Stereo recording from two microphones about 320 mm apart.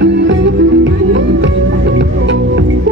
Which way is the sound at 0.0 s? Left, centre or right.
Right.